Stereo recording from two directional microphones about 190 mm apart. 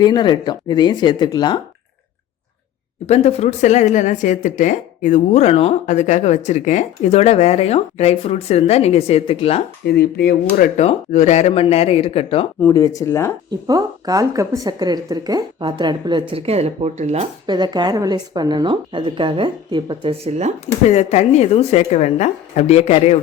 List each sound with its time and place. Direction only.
0.0 s speech: 20° left (ahead or behind)
3.1 s speech: 35° left (ahead or behind)
9.8 s speech: 55° left (ahead or behind)
10.8 s speech: 40° left (ahead or behind)
12.6 s speech: 15° left (ahead or behind)
13.5 s a woman's voice: 20° right (ahead or behind); by 17.2 s 35° right (ahead or behind)
17.4 s a woman's voice: 20° right (ahead or behind)
20.8 s speech: 35° left (ahead or behind)